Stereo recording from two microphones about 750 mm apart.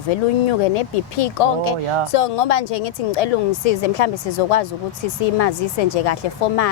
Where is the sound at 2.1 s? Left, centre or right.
Left.